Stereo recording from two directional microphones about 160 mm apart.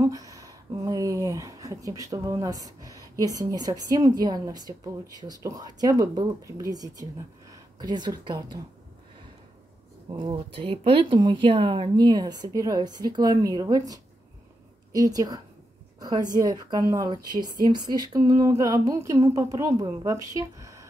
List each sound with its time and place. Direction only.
0.0 s speech: 20° right (ahead or behind)
10.1 s speech: 30° right (ahead or behind)